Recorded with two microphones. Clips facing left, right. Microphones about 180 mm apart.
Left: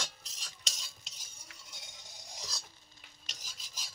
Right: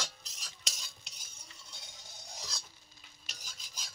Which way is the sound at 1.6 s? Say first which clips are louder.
Even; 20° left (ahead or behind).